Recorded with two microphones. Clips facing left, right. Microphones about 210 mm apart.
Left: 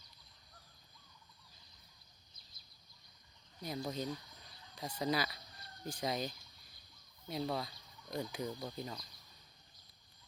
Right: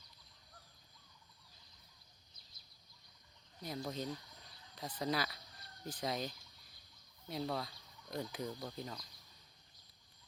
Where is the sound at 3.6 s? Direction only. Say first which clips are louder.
Left 2 dB; centre (ahead or behind).